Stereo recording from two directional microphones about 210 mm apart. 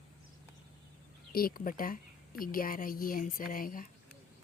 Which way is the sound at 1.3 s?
45° left (ahead or behind).